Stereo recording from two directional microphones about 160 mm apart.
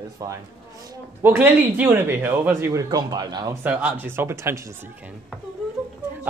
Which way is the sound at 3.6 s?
10° right (ahead or behind).